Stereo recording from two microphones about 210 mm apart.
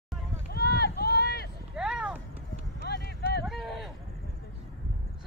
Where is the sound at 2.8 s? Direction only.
50° left (ahead or behind).